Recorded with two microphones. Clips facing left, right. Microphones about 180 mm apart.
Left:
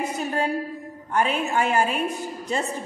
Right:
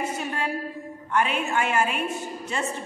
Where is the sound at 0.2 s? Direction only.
40° left (ahead or behind).